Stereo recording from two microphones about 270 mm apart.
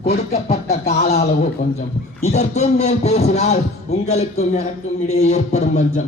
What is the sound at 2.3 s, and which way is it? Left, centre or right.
Music, left.